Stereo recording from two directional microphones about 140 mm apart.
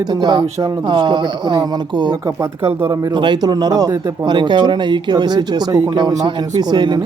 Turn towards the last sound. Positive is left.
turn(degrees=-30)  # may be behind; listen again after turning